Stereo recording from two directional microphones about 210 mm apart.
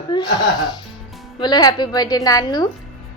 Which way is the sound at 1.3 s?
20° left (ahead or behind).